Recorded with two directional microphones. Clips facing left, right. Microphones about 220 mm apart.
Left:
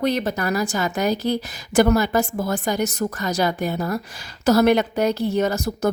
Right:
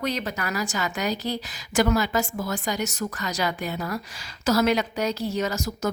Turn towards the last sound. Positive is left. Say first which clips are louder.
# left 6 dB
turn(degrees=60)  # may be behind; listen again after turning